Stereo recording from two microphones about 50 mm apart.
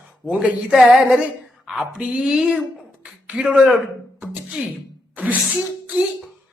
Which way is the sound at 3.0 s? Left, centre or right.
Right.